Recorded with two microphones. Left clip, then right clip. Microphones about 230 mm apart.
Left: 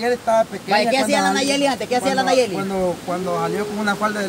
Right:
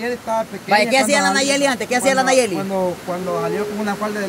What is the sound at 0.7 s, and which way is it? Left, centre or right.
Speech, right.